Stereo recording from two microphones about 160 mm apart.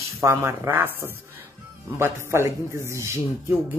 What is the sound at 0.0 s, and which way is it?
Speech, 20° right (ahead or behind).